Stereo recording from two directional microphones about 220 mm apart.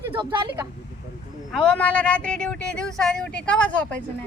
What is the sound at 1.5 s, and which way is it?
Speech, 5° left (ahead or behind).